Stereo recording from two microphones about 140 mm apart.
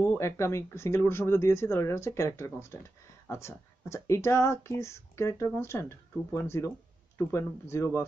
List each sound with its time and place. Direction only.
0.2 s speech: 20° left (ahead or behind)